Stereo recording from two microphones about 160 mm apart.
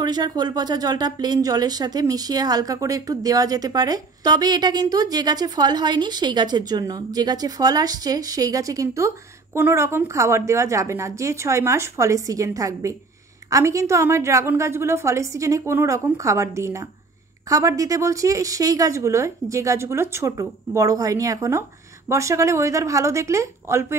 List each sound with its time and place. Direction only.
0.0 s speech: 25° right (ahead or behind)